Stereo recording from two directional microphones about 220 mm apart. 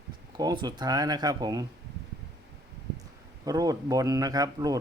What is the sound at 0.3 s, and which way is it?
Speech, 20° right (ahead or behind).